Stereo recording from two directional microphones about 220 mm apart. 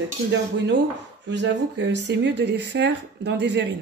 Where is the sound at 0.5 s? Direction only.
55° right (ahead or behind).